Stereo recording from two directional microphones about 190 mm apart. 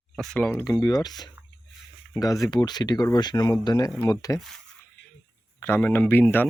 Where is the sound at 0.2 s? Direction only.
5° left (ahead or behind).